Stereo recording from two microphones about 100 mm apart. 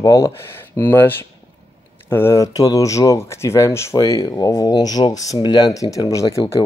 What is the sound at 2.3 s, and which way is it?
Speech, 35° left (ahead or behind).